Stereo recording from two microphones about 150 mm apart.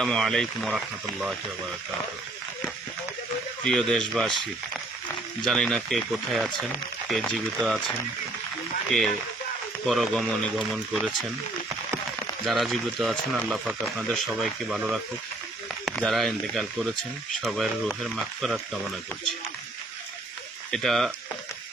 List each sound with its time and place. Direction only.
0.0 s speech: centre (ahead or behind)
3.7 s speech: centre (ahead or behind)
5.5 s speech: 5° left (ahead or behind)
12.5 s speech: centre (ahead or behind)
20.7 s speech: 5° left (ahead or behind)